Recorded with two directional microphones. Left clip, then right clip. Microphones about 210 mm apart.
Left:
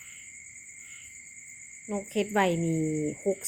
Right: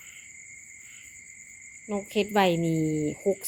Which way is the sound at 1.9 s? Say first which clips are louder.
Right 2 dB; 20° right (ahead or behind).